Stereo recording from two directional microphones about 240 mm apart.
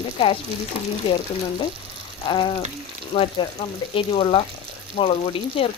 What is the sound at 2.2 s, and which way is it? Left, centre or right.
Speech, centre.